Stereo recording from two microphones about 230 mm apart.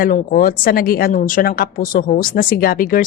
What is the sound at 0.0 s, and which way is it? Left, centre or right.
A woman's voice, left.